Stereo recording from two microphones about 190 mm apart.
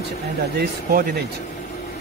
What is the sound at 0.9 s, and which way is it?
Speech, 50° right (ahead or behind).